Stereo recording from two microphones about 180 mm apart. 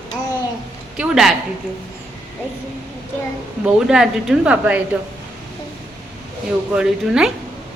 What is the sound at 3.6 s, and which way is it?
Speech, 5° right (ahead or behind).